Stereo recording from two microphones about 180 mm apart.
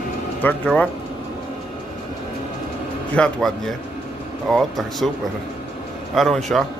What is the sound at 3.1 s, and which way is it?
Speech, 5° left (ahead or behind).